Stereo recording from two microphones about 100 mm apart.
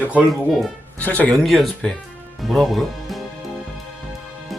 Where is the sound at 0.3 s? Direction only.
Centre (ahead or behind).